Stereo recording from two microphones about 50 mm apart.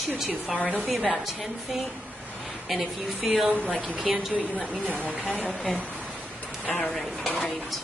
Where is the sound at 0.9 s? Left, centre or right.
Centre.